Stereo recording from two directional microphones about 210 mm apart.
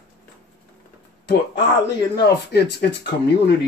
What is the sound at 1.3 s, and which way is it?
Speech, 55° left (ahead or behind).